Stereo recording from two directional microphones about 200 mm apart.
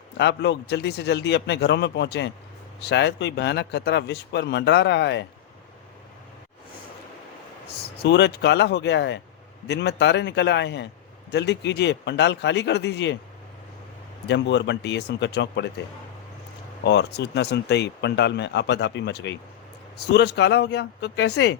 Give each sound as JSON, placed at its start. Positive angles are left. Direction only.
{"t": 0.2, "sound": "speech", "side_deg": 60}
{"t": 7.9, "sound": "speech", "side_deg": 60}
{"t": 14.3, "sound": "speech", "side_deg": 60}
{"t": 16.8, "sound": "speech", "side_deg": 55}